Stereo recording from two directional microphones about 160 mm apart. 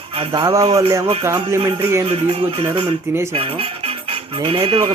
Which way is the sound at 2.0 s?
40° right (ahead or behind).